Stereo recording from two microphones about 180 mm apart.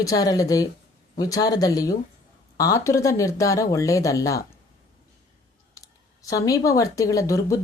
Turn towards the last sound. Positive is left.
turn(degrees=15)  # may be behind; listen again after turning